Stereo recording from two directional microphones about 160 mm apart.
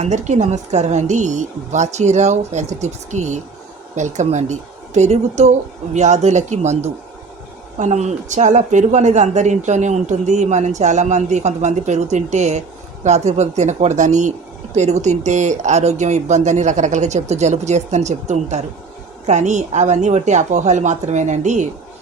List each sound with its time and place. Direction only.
0.0 s speech: 50° right (ahead or behind)